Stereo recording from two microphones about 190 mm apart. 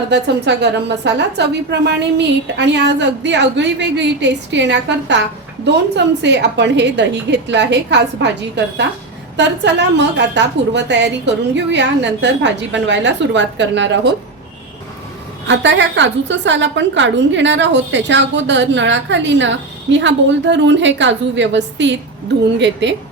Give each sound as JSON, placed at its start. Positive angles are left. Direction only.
{"t": 0.1, "sound": "a woman's voice", "side_deg": -65}
{"t": 15.4, "sound": "a woman's voice", "side_deg": -70}